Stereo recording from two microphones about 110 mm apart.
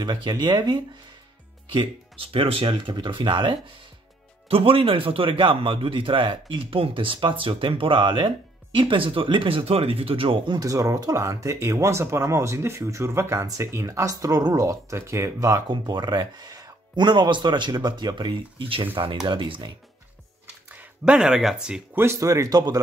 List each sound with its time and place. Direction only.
0.0 s speech: 40° right (ahead or behind)
1.7 s a man's voice: 50° right (ahead or behind)
10.6 s speech: 30° right (ahead or behind)
15.7 s a man's voice: 40° right (ahead or behind)
20.6 s speech: 10° right (ahead or behind)
21.9 s speech: 25° right (ahead or behind)